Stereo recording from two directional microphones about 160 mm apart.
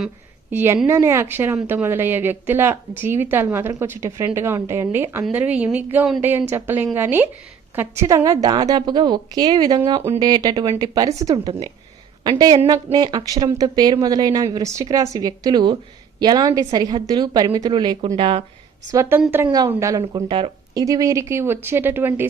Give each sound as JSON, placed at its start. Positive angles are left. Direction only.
{"t": 0.5, "sound": "a woman's voice", "side_deg": -15}
{"t": 18.9, "sound": "a woman's voice", "side_deg": -15}
{"t": 20.2, "sound": "speech", "side_deg": -35}
{"t": 20.8, "sound": "speech", "side_deg": -20}